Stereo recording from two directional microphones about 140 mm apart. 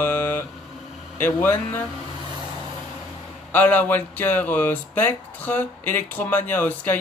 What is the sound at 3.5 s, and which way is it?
Speech, 10° left (ahead or behind).